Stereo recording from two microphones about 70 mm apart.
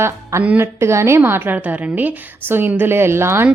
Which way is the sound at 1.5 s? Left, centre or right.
Right.